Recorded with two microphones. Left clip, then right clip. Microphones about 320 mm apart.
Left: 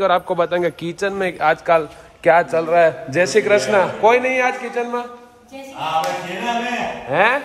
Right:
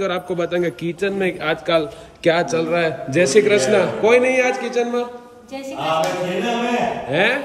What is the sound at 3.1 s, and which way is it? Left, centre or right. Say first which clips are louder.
A man's voice: even; left.